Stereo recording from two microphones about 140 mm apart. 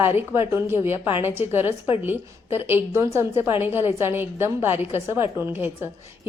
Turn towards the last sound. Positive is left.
turn(degrees=-15)  # may be behind; listen again after turning